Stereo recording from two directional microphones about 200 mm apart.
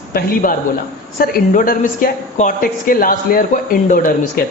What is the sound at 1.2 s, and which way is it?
A woman's voice, 45° left (ahead or behind).